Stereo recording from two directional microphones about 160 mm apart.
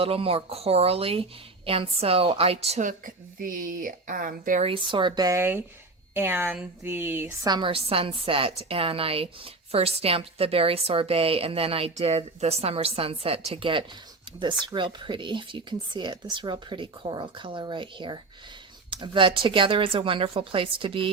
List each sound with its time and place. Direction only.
0.0 s a woman's voice: 35° right (ahead or behind); by 4.6 s 60° right (ahead or behind)
4.6 s speech: 30° right (ahead or behind); by 7.3 s 15° right (ahead or behind)
7.4 s a woman's voice: 30° right (ahead or behind)